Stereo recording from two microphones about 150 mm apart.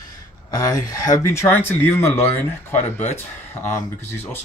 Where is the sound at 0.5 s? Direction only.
25° left (ahead or behind).